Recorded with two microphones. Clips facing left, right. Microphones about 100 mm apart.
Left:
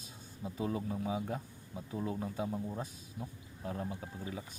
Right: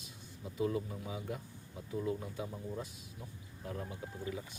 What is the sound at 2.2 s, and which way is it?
Speech, 35° left (ahead or behind).